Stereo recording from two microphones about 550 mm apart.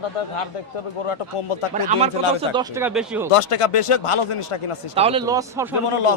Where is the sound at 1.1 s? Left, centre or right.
Left.